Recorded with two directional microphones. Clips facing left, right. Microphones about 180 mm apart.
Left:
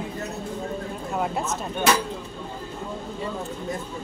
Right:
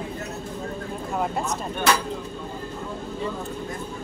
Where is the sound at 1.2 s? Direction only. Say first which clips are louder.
Even; centre (ahead or behind).